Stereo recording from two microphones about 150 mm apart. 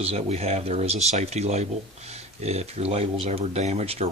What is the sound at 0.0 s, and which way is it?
Speech, 45° right (ahead or behind).